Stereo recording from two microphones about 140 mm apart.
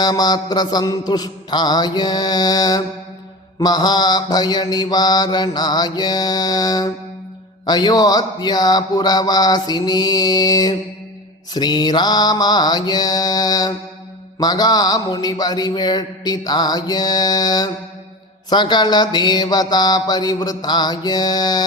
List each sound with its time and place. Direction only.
0.0 s speech: 30° left (ahead or behind)